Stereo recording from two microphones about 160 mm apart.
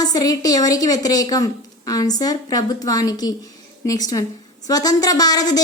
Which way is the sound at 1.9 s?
25° left (ahead or behind).